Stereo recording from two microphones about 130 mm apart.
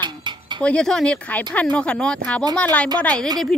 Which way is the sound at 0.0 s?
35° right (ahead or behind).